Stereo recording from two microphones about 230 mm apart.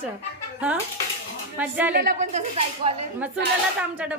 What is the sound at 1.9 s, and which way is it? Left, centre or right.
Speech, right.